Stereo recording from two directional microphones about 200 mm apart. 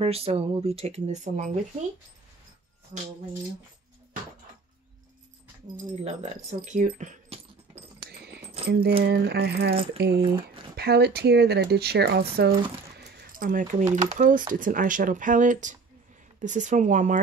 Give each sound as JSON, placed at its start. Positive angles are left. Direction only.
{"t": 0.0, "sound": "speech", "side_deg": -30}
{"t": 5.8, "sound": "speech", "side_deg": -35}
{"t": 8.6, "sound": "speech", "side_deg": -50}
{"t": 10.2, "sound": "speech", "side_deg": -25}
{"t": 10.8, "sound": "speech", "side_deg": -55}